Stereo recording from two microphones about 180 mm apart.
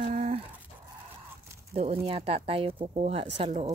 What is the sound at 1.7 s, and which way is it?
Speech, 35° right (ahead or behind).